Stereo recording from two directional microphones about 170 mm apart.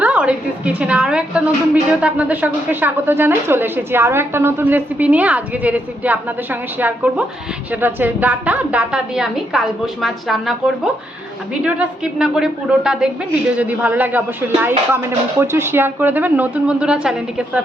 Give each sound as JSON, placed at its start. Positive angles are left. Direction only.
{"t": 0.0, "sound": "a woman's voice", "side_deg": -5}
{"t": 11.6, "sound": "a woman's voice", "side_deg": -5}